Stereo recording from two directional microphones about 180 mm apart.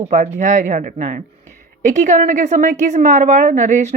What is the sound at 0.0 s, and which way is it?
A woman's voice, 40° right (ahead or behind).